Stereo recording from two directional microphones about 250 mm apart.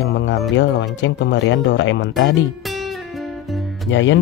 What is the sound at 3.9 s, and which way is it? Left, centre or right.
Speech, left.